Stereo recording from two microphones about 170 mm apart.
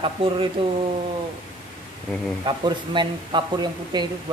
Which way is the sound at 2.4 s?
30° right (ahead or behind).